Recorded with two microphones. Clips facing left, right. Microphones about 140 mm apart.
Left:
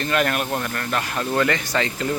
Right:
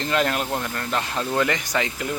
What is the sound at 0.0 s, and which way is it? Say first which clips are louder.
Speech: left 1 dB; 20° right (ahead or behind).